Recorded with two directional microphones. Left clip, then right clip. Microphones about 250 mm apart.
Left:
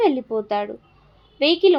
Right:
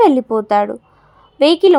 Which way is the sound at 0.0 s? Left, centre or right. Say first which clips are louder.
Right 8 dB; right.